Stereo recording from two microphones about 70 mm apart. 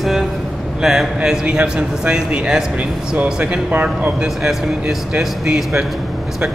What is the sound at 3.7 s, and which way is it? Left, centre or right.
Speech, right.